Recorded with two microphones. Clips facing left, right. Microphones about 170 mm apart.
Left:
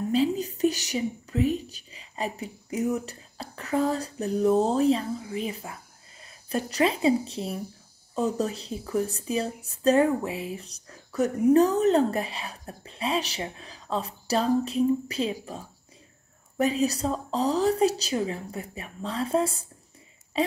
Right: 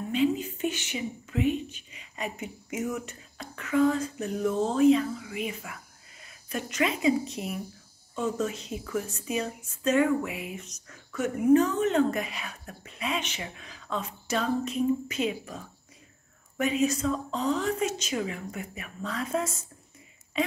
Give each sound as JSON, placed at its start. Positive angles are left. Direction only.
{"t": 0.1, "sound": "a woman's voice", "side_deg": 35}